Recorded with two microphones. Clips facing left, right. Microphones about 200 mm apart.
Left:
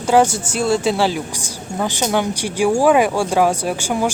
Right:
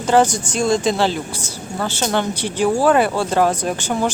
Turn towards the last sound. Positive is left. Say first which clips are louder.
# left 1 dB
turn(degrees=10)  # may be behind; listen again after turning